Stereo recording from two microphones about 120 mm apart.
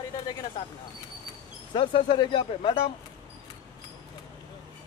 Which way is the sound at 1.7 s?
40° left (ahead or behind).